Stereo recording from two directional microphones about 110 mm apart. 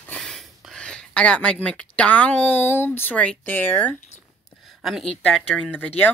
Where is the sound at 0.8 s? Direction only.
10° left (ahead or behind).